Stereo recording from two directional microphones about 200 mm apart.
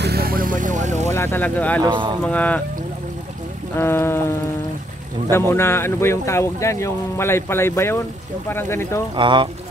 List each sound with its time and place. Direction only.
0.0 s speech: 50° right (ahead or behind); by 1.1 s 35° right (ahead or behind)
1.1 s speech: 10° left (ahead or behind)
1.8 s speech: 25° right (ahead or behind)
2.2 s speech: 5° left (ahead or behind)
3.7 s speech: 10° left (ahead or behind)
5.5 s speech: 10° left (ahead or behind)
9.1 s speech: 25° right (ahead or behind)